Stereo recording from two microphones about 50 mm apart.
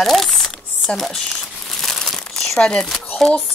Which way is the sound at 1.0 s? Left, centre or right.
Centre.